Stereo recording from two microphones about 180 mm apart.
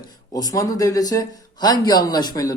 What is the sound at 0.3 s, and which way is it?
Speech, 20° left (ahead or behind).